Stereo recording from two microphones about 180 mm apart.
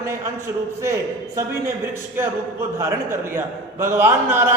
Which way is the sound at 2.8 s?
15° right (ahead or behind).